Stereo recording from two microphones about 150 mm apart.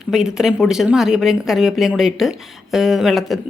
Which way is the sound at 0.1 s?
5° right (ahead or behind).